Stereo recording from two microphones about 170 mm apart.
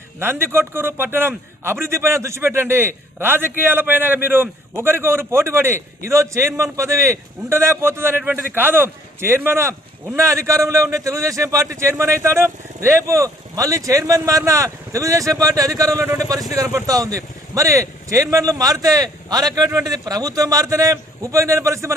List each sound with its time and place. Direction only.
0.2 s a man's voice: 15° right (ahead or behind)